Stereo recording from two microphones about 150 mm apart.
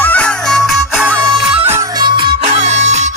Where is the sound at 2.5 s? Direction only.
45° right (ahead or behind).